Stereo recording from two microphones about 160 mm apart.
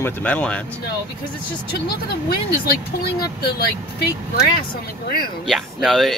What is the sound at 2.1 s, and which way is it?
Speech, 75° left (ahead or behind).